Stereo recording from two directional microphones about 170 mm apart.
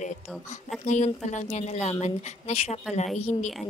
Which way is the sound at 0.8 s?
45° left (ahead or behind).